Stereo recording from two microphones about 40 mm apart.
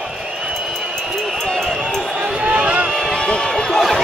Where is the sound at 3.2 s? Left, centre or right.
Left.